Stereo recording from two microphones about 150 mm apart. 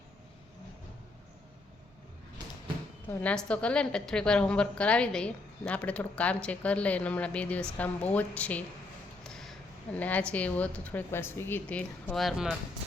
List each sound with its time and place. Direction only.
3.1 s a woman's voice: 10° left (ahead or behind)
9.2 s a sound: 5° left (ahead or behind)
10.0 s a woman's voice: 10° left (ahead or behind)